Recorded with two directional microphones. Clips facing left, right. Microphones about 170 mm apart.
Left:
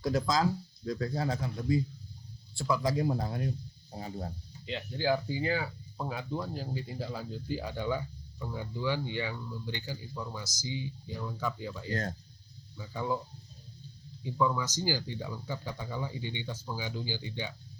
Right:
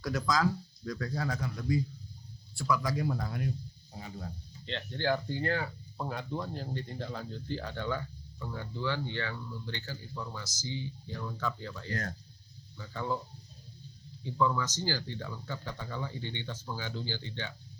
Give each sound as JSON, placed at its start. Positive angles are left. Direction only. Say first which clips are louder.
{"t": 0.0, "sound": "speech", "louder": "left 1 dB", "side_deg": 25}
{"t": 4.6, "sound": "speech", "louder": "left 1 dB", "side_deg": 5}
{"t": 11.9, "sound": "speech", "louder": "left 3 dB", "side_deg": 25}
{"t": 12.7, "sound": "speech", "louder": "left 2 dB", "side_deg": 15}
{"t": 14.3, "sound": "speech", "louder": "even", "side_deg": 15}